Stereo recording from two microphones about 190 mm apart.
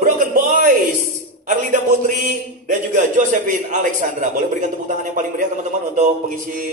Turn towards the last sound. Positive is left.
turn(degrees=-45)  # may be behind; listen again after turning